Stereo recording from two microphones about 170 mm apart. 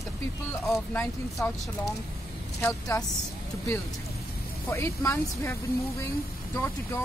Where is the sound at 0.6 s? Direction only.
5° left (ahead or behind).